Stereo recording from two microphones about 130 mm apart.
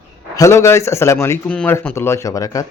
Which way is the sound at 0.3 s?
20° left (ahead or behind).